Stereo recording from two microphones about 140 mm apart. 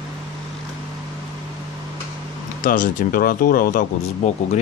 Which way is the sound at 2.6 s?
85° left.